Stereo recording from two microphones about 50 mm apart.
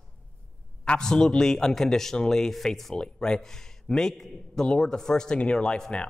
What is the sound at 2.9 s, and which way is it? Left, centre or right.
A man's voice, centre.